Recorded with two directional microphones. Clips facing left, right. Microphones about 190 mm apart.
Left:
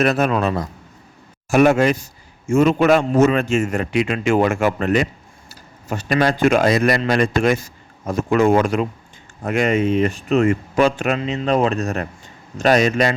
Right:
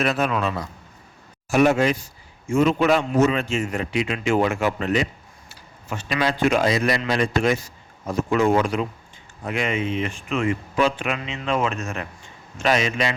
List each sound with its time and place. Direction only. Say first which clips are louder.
0.0 s a man's voice: left 5 dB; 45° left (ahead or behind)
5.5 s a man's voice: left 5 dB; 40° left (ahead or behind)